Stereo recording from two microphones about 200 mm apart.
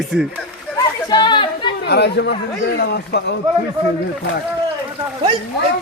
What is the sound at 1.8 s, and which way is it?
Speech, 55° left (ahead or behind).